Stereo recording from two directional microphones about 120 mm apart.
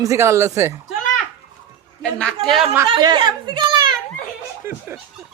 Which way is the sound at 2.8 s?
40° right (ahead or behind).